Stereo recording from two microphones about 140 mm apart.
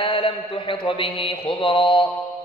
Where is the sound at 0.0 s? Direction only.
40° left (ahead or behind).